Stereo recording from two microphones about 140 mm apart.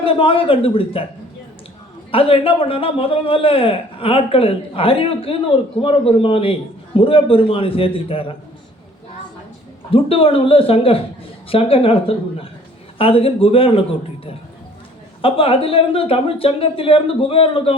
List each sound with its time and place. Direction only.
0.0 s a man's voice: 40° left (ahead or behind)
2.1 s a man's voice: 40° left (ahead or behind)
9.9 s a man's voice: 40° left (ahead or behind)
15.2 s a man's voice: 40° left (ahead or behind)